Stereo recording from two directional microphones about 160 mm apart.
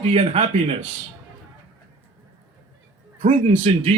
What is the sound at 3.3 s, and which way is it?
Speech, 45° right (ahead or behind).